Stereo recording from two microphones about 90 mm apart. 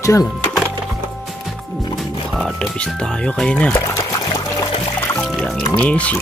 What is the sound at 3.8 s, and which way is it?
Music, 35° left (ahead or behind).